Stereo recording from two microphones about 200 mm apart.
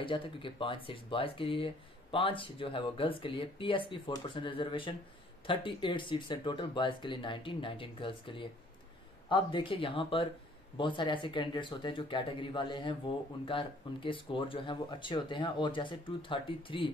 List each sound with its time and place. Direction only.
0.0 s speech: 25° left (ahead or behind)